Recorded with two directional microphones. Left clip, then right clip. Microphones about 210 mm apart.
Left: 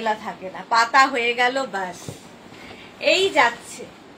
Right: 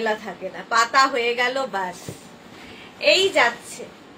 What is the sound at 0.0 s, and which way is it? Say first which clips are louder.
A woman's voice: even; 20° right (ahead or behind).